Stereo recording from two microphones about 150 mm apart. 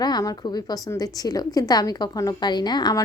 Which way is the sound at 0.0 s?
25° left (ahead or behind).